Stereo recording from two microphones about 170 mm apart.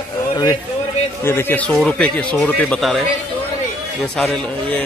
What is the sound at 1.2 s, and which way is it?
Speech, 15° left (ahead or behind).